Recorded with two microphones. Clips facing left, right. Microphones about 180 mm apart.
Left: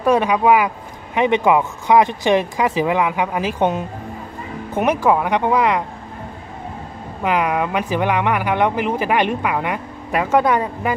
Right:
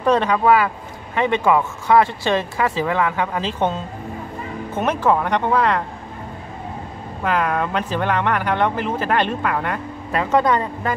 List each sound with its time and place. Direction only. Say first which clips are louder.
0.0 s speech: left 1 dB; 10° left (ahead or behind)
7.2 s speech: left 2 dB; 15° left (ahead or behind)